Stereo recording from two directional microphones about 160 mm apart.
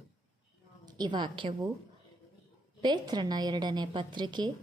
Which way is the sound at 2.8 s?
25° right (ahead or behind).